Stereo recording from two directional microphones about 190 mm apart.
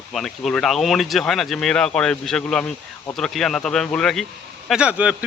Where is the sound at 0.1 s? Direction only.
Centre (ahead or behind).